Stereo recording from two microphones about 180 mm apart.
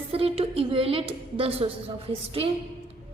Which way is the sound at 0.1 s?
35° right (ahead or behind).